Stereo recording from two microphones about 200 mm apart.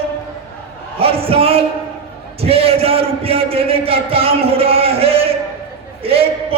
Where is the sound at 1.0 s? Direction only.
30° right (ahead or behind).